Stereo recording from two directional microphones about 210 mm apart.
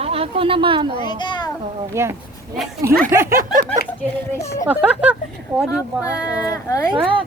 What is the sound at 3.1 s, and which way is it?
Speech, 10° right (ahead or behind).